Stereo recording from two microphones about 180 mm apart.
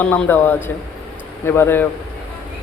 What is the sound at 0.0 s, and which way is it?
A man's voice, 5° left (ahead or behind).